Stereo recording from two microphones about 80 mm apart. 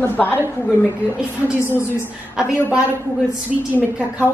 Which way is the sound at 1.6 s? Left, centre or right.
Left.